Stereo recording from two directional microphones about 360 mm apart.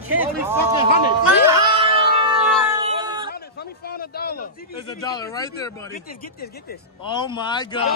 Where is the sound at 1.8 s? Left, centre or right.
Centre.